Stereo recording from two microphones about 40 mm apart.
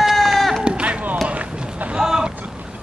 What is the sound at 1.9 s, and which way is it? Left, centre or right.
Boat, centre.